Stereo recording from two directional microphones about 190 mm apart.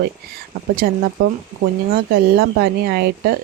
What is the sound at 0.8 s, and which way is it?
Speech, 55° right (ahead or behind).